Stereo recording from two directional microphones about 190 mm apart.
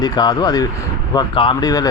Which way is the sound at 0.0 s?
20° left (ahead or behind).